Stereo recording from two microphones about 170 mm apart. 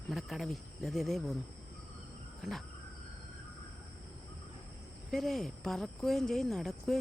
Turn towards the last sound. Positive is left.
turn(degrees=0)  # may be behind; listen again after turning